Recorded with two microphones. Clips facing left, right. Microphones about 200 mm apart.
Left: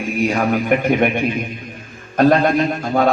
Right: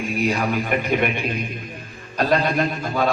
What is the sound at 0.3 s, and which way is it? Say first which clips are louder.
Speech: left 5 dB; 50° left (ahead or behind).